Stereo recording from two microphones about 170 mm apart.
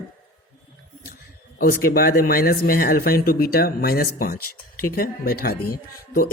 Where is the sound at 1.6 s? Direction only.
60° left (ahead or behind).